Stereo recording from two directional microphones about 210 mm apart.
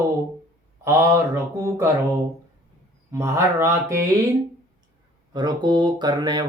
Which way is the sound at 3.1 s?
15° right (ahead or behind).